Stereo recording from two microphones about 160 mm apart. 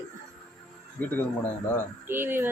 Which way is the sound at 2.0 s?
15° right (ahead or behind).